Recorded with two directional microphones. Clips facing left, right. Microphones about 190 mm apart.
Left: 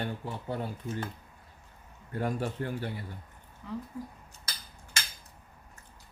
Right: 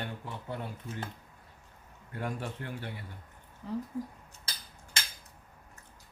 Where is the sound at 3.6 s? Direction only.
35° right (ahead or behind).